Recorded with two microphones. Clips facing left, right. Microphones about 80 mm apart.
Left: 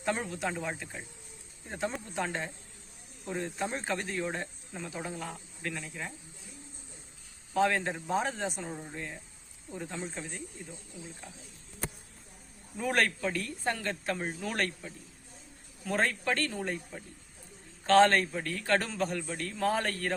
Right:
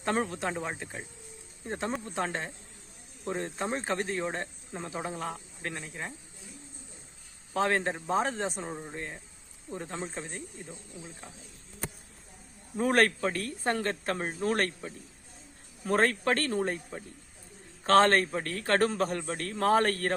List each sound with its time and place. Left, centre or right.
0.0 s speech: right
4.9 s speech: right
7.5 s speech: right
12.7 s a man's voice: right